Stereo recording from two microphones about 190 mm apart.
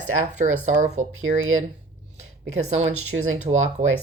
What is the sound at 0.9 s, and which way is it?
Speech, 90° right.